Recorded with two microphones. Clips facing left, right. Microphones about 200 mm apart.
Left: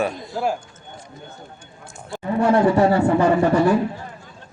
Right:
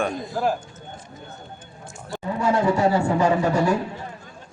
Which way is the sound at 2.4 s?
60° left (ahead or behind).